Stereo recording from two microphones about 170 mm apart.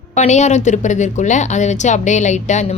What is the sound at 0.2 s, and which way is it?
Speech, 45° left (ahead or behind).